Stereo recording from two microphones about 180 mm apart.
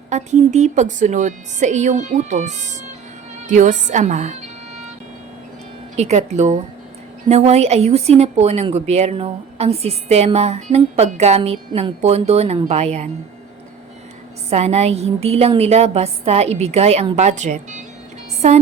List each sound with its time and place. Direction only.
0.1 s a woman's voice: 40° right (ahead or behind)
3.4 s music: 45° right (ahead or behind)
6.0 s a woman's voice: 40° right (ahead or behind)
14.5 s a woman's voice: 35° right (ahead or behind)